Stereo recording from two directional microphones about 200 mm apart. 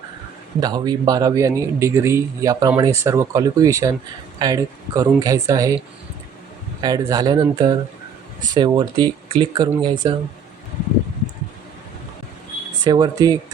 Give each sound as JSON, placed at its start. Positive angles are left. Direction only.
{"t": 0.6, "sound": "a man's voice", "side_deg": -20}
{"t": 6.8, "sound": "speech", "side_deg": -20}
{"t": 12.8, "sound": "speech", "side_deg": -20}